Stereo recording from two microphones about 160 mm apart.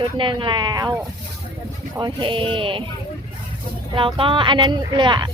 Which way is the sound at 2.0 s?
30° right (ahead or behind).